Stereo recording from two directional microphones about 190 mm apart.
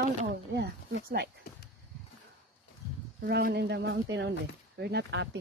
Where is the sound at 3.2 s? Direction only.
55° right (ahead or behind).